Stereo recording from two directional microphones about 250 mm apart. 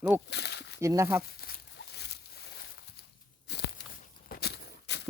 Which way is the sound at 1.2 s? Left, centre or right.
Left.